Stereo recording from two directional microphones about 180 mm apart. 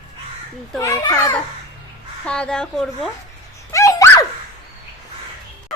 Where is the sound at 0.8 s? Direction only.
15° left (ahead or behind).